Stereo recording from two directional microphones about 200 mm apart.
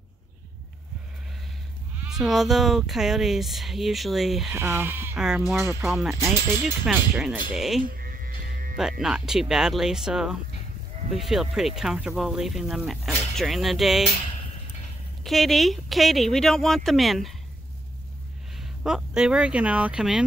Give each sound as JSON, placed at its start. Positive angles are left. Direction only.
{"t": 2.0, "sound": "speech", "side_deg": 0}
{"t": 4.5, "sound": "speech", "side_deg": -10}
{"t": 5.9, "sound": "speech", "side_deg": 0}
{"t": 7.9, "sound": "music", "side_deg": -45}
{"t": 9.0, "sound": "speech", "side_deg": -5}
{"t": 15.2, "sound": "speech", "side_deg": 0}
{"t": 18.6, "sound": "speech", "side_deg": 0}